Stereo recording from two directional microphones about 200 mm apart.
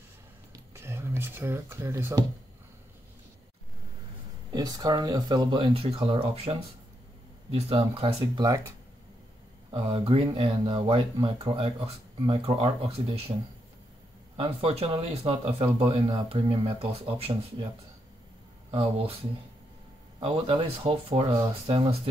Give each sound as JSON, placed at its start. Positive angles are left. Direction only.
{"t": 0.7, "sound": "speech", "side_deg": -15}
{"t": 4.5, "sound": "speech", "side_deg": -20}
{"t": 7.5, "sound": "speech", "side_deg": -25}
{"t": 9.7, "sound": "speech", "side_deg": -25}
{"t": 14.3, "sound": "speech", "side_deg": -25}
{"t": 18.7, "sound": "speech", "side_deg": -25}
{"t": 20.2, "sound": "speech", "side_deg": -25}